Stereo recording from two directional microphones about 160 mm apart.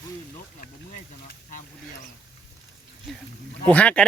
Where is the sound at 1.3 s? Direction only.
55° left (ahead or behind).